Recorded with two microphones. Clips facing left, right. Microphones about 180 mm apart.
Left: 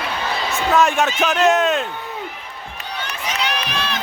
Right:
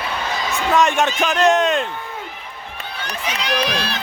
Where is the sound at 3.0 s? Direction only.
40° right (ahead or behind).